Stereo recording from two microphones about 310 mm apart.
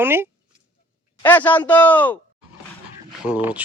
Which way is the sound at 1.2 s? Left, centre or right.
Centre.